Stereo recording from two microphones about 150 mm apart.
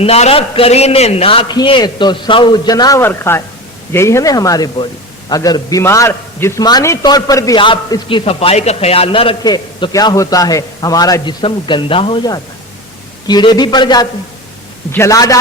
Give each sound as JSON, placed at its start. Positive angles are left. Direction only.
{"t": 0.0, "sound": "a man's voice", "side_deg": 40}
{"t": 8.2, "sound": "a man's voice", "side_deg": 40}